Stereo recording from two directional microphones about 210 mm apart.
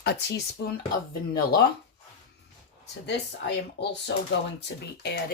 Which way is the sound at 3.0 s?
55° left (ahead or behind).